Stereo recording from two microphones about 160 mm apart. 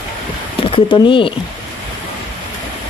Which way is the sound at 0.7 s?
30° left (ahead or behind).